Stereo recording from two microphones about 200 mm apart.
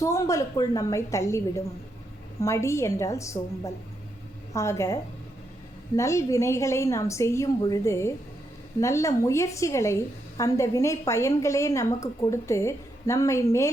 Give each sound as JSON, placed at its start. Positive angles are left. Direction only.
{"t": 0.0, "sound": "a woman's voice", "side_deg": 15}
{"t": 6.0, "sound": "a woman's voice", "side_deg": 15}